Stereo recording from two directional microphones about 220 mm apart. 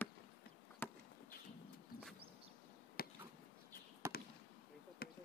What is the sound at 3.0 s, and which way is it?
Chop, 45° left (ahead or behind).